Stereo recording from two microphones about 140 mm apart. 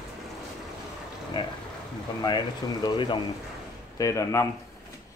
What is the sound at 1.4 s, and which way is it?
Speech, 30° left (ahead or behind).